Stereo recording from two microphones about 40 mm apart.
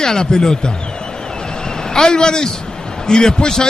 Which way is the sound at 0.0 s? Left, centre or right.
Centre.